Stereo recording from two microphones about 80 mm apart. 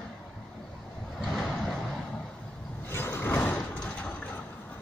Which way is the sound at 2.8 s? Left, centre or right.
Left.